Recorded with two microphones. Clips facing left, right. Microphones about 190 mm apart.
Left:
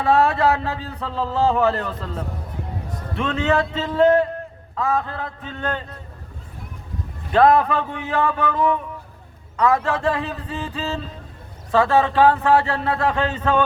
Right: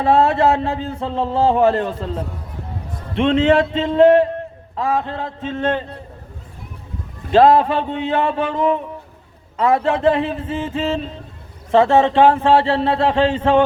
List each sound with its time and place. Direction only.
0.0 s a man's voice: 25° right (ahead or behind)
7.3 s a man's voice: 25° right (ahead or behind)